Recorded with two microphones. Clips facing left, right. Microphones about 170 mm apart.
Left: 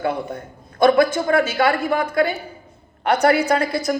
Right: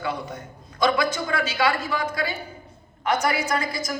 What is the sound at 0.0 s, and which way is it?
A woman's voice, 55° left (ahead or behind).